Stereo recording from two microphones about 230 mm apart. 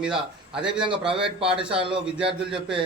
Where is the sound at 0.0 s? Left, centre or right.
Centre.